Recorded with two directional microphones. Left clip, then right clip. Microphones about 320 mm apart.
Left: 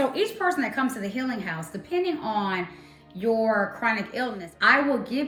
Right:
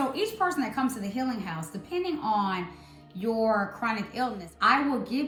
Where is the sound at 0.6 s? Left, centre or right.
Right.